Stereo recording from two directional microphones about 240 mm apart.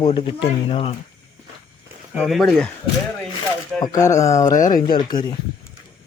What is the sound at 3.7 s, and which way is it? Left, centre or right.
Speech, centre.